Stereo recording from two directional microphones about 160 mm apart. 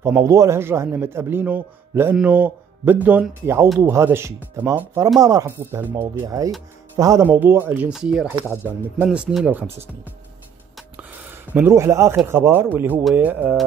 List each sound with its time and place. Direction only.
0.0 s a man's voice: 20° right (ahead or behind)
11.0 s a sound: 10° right (ahead or behind)
12.3 s a man's voice: 15° right (ahead or behind)